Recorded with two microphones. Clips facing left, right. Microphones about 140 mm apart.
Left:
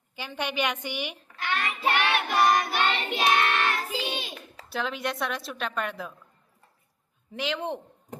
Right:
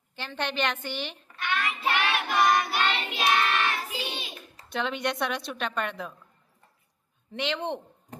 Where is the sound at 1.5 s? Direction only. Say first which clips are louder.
Left 1 dB; 35° left (ahead or behind).